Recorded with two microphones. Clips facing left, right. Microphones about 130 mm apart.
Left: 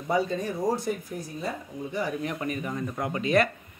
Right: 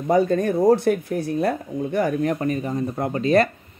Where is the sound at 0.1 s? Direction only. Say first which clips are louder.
Right 8 dB; 55° right (ahead or behind).